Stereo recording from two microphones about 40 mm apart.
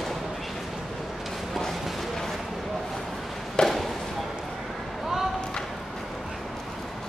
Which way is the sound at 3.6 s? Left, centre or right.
Centre.